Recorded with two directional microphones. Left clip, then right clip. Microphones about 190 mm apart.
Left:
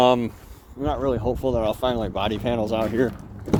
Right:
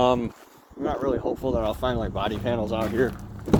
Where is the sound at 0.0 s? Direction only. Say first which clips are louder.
Left 4 dB; 55° left (ahead or behind).